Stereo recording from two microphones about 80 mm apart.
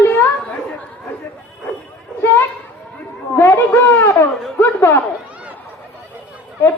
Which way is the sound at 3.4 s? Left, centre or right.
Left.